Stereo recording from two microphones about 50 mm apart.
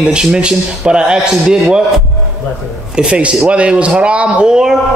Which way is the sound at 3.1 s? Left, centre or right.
Right.